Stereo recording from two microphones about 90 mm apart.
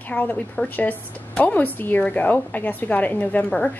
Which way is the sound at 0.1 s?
20° left (ahead or behind).